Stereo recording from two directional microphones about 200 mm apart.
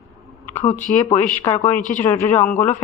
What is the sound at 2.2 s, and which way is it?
Speech, 10° left (ahead or behind).